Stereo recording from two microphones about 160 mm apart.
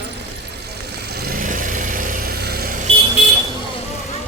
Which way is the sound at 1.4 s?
55° right (ahead or behind).